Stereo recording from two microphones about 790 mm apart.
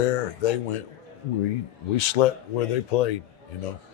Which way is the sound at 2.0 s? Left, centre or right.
Left.